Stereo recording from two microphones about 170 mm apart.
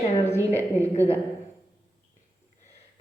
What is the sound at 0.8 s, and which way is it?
Speech, 15° right (ahead or behind).